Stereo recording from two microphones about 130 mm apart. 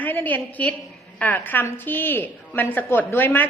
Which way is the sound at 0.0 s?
15° left (ahead or behind).